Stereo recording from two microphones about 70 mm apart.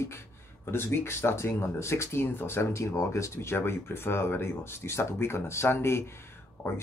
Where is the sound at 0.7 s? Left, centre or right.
Left.